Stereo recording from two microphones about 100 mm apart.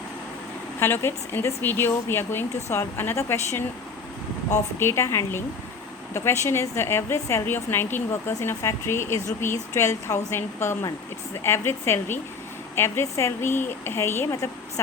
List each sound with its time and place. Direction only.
0.8 s speech: 25° left (ahead or behind)